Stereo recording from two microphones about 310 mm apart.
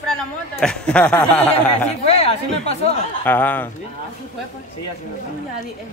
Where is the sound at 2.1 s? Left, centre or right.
Centre.